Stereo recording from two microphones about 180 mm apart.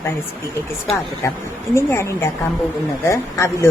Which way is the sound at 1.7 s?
15° left (ahead or behind).